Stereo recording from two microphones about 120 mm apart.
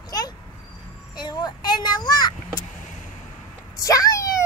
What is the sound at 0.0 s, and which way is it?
Vehicle, 35° left (ahead or behind).